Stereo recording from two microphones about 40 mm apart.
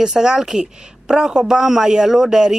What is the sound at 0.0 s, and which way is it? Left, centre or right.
A woman's voice, centre.